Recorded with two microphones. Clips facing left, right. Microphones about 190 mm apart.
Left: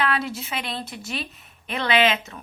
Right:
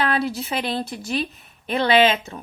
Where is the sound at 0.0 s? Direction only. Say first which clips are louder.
Right 3 dB; 35° right (ahead or behind).